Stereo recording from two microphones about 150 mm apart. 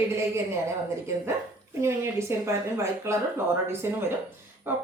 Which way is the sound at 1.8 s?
15° right (ahead or behind).